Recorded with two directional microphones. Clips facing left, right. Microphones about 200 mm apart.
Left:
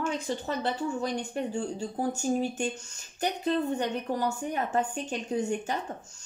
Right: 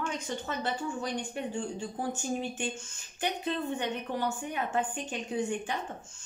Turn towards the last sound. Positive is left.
turn(degrees=40)  # may be behind; listen again after turning